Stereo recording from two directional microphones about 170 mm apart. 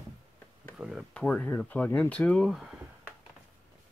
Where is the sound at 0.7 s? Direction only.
5° right (ahead or behind).